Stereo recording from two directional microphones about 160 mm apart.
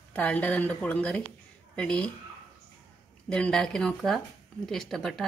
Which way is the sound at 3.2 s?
5° left (ahead or behind).